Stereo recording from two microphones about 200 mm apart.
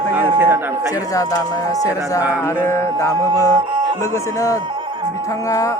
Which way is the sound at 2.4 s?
15° left (ahead or behind).